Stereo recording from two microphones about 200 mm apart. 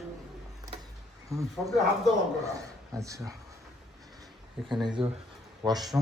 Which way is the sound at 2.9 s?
15° right (ahead or behind).